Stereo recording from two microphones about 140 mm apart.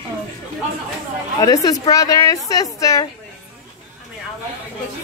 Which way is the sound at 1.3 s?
25° left (ahead or behind).